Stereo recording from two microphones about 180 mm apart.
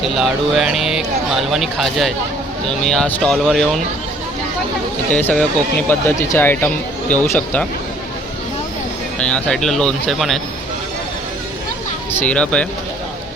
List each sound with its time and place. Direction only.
0.0 s speech: centre (ahead or behind)
5.1 s speech: 5° left (ahead or behind)
9.1 s speech: 5° left (ahead or behind)
12.1 s speech: 5° left (ahead or behind)